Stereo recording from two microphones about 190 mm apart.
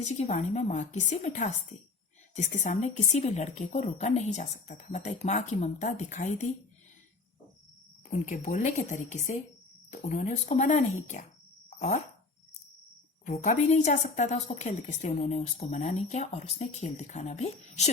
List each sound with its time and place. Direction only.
0.0 s a woman's voice: 35° left (ahead or behind)
8.1 s a woman's voice: 40° left (ahead or behind)
13.2 s a woman's voice: 40° left (ahead or behind)